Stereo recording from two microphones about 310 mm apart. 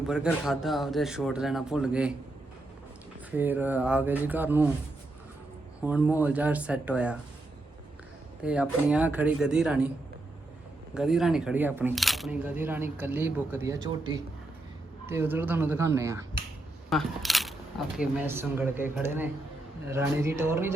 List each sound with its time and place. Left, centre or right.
0.1 s speech: centre
3.3 s speech: centre
5.8 s speech: centre
8.4 s speech: centre
10.9 s speech: centre